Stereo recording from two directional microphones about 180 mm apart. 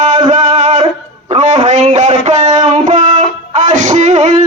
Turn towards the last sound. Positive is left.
turn(degrees=-40)  # may be behind; listen again after turning